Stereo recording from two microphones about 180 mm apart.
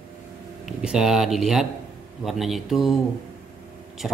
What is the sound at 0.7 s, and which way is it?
Speech, 5° right (ahead or behind).